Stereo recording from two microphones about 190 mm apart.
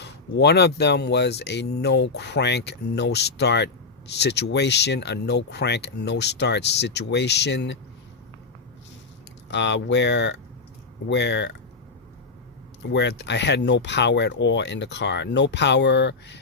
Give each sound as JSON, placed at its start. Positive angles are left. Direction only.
{"t": 0.0, "sound": "speech", "side_deg": 60}
{"t": 9.5, "sound": "speech", "side_deg": 70}
{"t": 12.8, "sound": "speech", "side_deg": 65}